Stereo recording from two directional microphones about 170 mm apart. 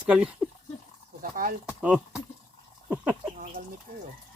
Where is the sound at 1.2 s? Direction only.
55° right (ahead or behind).